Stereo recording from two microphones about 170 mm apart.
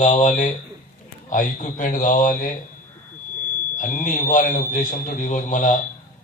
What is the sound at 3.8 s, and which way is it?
A man's voice, 50° left (ahead or behind).